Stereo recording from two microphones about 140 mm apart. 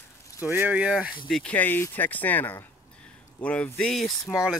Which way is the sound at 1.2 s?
10° left (ahead or behind).